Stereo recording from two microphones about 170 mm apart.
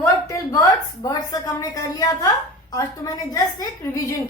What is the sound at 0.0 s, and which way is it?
Speech, 20° left (ahead or behind).